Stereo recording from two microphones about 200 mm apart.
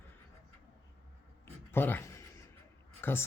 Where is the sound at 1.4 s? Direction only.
10° left (ahead or behind).